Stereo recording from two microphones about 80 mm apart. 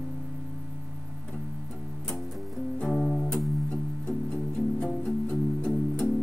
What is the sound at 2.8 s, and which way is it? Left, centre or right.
Music, centre.